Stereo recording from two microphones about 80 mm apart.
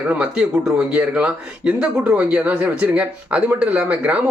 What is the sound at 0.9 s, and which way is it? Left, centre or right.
Speech, centre.